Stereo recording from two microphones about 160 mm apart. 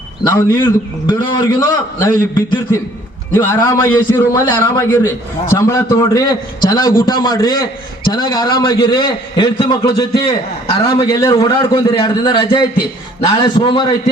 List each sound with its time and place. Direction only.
0.3 s a man's voice: 20° left (ahead or behind)
3.3 s a man's voice: 15° left (ahead or behind); by 13.8 s 30° left (ahead or behind)